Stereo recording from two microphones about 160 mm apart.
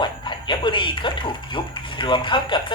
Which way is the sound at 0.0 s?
30° left (ahead or behind).